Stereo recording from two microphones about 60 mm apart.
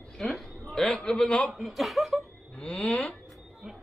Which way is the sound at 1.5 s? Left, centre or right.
Centre.